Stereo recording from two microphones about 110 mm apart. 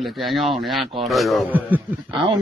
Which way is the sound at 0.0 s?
Centre (ahead or behind).